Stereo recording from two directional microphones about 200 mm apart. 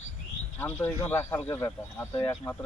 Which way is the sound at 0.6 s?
10° left (ahead or behind).